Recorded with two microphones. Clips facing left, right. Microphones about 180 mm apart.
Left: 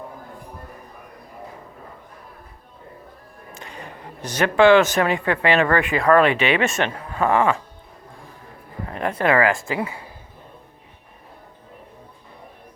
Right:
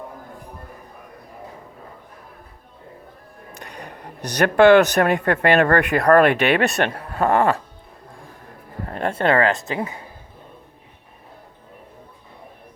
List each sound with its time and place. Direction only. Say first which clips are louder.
3.5 s speech: even; 65° right (ahead or behind)
7.2 s a sound: right 1 dB; 40° right (ahead or behind)
8.9 s speech: right 1 dB; 30° right (ahead or behind)